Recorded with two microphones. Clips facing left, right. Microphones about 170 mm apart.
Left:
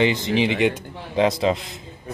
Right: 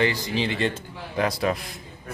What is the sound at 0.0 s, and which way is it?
Speech, 20° left (ahead or behind).